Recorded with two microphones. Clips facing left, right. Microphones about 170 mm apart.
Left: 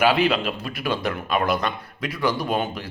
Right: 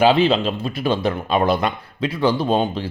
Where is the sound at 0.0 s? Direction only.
25° right (ahead or behind).